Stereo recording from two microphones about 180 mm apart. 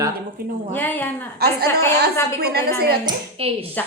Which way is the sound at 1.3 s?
60° right (ahead or behind).